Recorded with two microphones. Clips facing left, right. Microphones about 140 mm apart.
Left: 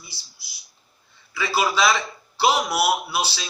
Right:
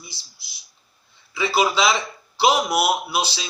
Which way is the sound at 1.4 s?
15° right (ahead or behind).